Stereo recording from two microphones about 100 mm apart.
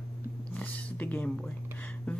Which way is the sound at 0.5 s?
15° left (ahead or behind).